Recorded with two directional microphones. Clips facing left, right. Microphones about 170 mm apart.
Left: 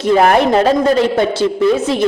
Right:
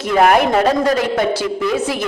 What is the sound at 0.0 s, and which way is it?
A woman's voice, 30° left (ahead or behind).